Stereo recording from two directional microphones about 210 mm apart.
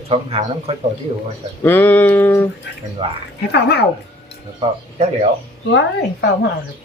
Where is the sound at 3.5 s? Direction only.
50° left (ahead or behind).